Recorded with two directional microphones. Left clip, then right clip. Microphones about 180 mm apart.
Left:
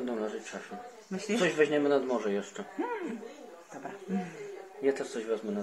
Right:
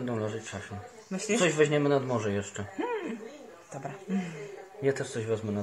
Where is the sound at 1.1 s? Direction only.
30° right (ahead or behind).